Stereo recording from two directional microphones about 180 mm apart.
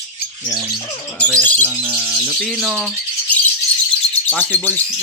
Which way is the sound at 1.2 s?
5° left (ahead or behind).